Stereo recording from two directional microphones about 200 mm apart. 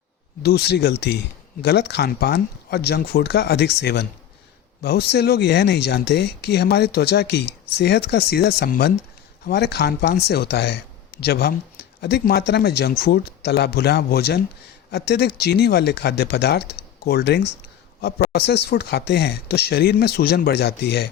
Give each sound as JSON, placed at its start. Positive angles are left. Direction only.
{"t": 0.4, "sound": "speech", "side_deg": 55}